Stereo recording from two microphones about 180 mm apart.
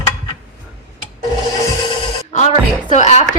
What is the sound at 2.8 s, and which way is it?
Speech, 40° left (ahead or behind).